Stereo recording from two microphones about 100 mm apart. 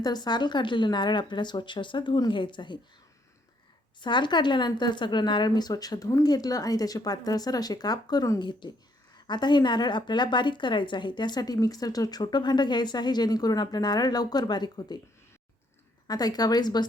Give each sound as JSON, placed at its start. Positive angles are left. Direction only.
{"t": 0.0, "sound": "a woman's voice", "side_deg": 45}
{"t": 4.0, "sound": "a woman's voice", "side_deg": 50}
{"t": 16.0, "sound": "a woman's voice", "side_deg": 40}